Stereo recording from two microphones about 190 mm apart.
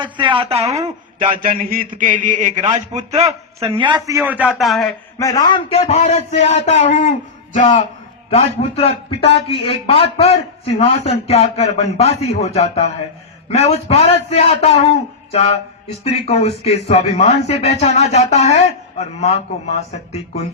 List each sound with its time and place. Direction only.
0.0 s a man's voice: 25° right (ahead or behind)
1.2 s a man's voice: 45° right (ahead or behind); by 4.2 s 20° right (ahead or behind)
4.2 s a man's voice: 5° right (ahead or behind)
5.2 s a man's voice: 20° left (ahead or behind)